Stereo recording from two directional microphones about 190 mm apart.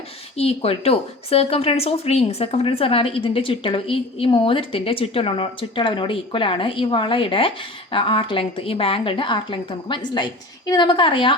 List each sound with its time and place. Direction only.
0.3 s a woman's voice: 30° left (ahead or behind)